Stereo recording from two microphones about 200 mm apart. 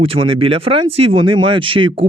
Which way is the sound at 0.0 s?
25° right (ahead or behind).